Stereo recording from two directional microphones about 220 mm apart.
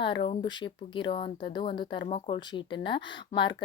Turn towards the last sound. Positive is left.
turn(degrees=20)  # may be behind; listen again after turning